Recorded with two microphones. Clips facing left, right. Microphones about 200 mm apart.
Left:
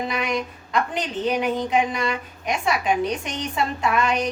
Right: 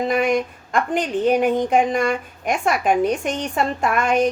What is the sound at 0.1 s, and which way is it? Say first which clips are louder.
Speech: right 7 dB; 50° right (ahead or behind).